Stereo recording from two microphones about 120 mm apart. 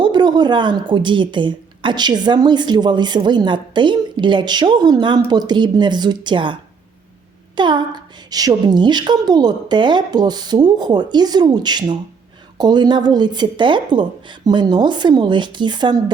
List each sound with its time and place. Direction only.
0.0 s a woman's voice: 35° right (ahead or behind)